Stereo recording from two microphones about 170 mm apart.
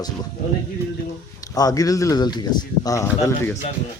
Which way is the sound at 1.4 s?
20° left (ahead or behind).